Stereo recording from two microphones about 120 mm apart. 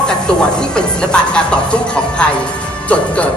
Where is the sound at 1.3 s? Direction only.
10° left (ahead or behind).